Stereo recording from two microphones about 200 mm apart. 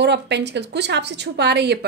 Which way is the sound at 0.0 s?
60° right (ahead or behind).